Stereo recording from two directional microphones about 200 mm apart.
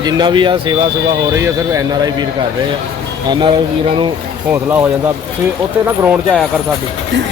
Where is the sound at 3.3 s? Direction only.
25° right (ahead or behind).